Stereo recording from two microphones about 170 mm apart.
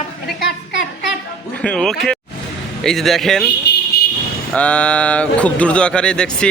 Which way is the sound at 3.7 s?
80° left.